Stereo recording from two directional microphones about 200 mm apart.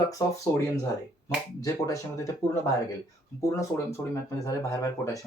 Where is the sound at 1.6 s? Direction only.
15° left (ahead or behind).